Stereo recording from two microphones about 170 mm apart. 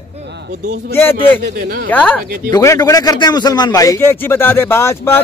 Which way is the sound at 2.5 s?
20° left (ahead or behind).